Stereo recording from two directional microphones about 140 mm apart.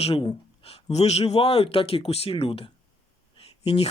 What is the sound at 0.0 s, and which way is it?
Speech, 45° left (ahead or behind).